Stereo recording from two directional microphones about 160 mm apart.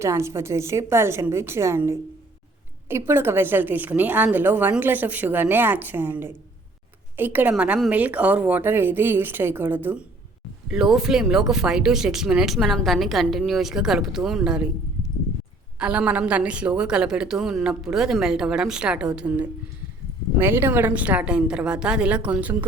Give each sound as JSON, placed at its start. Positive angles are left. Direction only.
{"t": 0.0, "sound": "a woman's voice", "side_deg": -15}
{"t": 15.8, "sound": "a woman's voice", "side_deg": -5}